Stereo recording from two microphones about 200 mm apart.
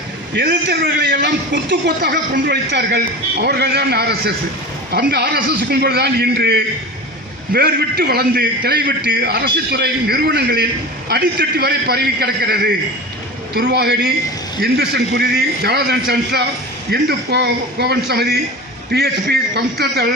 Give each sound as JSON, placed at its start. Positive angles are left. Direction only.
{"t": 0.3, "sound": "a man's voice", "side_deg": -60}